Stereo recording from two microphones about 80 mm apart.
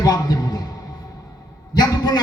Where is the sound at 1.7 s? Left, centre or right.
Left.